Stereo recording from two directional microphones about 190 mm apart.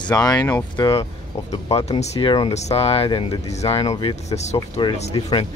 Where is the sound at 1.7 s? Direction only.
35° left (ahead or behind).